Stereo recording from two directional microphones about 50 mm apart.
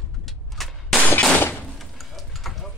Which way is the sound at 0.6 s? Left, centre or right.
Centre.